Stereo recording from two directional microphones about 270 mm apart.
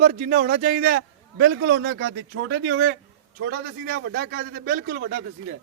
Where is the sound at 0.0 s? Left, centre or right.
Right.